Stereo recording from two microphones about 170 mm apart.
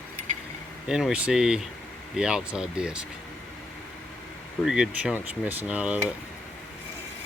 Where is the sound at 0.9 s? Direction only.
5° right (ahead or behind).